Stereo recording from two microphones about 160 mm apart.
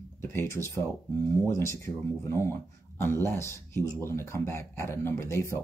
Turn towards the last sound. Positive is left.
turn(degrees=15)  # may be behind; listen again after turning